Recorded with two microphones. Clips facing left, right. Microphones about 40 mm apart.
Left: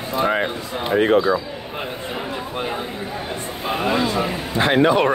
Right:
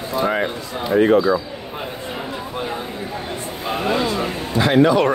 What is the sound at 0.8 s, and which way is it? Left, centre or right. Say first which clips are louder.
Speech: right 2 dB; left.